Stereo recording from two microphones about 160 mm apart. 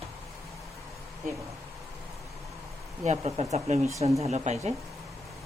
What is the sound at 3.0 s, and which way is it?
Speech, 40° right (ahead or behind).